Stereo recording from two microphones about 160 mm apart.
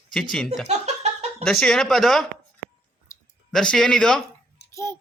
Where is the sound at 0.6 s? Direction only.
45° right (ahead or behind).